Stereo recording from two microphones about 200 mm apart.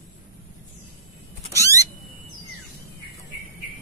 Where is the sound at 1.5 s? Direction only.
15° right (ahead or behind).